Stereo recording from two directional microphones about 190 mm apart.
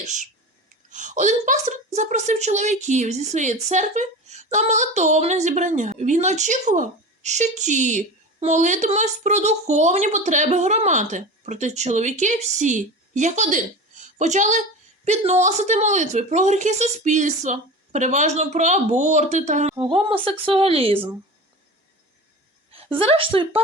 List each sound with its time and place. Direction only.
0.0 s a woman's voice: 40° right (ahead or behind)
19.7 s speech: 25° right (ahead or behind)
22.7 s a woman's voice: 30° right (ahead or behind)